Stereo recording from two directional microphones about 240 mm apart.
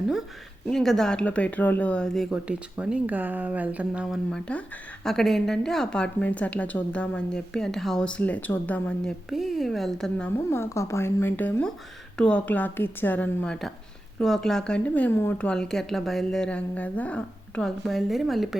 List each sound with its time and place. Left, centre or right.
0.7 s a woman's voice: centre